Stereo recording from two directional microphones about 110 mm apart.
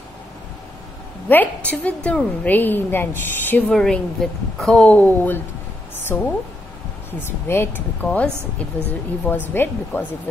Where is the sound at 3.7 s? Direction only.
5° left (ahead or behind).